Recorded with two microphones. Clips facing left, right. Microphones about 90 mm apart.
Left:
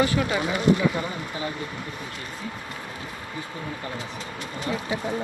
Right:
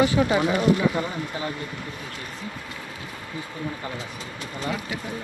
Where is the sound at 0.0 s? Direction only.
20° right (ahead or behind).